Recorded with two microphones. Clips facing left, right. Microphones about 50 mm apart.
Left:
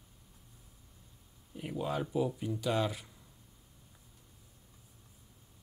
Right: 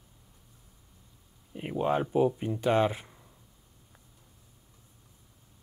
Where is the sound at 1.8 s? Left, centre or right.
Right.